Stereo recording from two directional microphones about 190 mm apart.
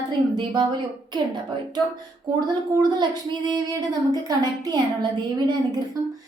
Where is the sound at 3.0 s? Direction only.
20° right (ahead or behind).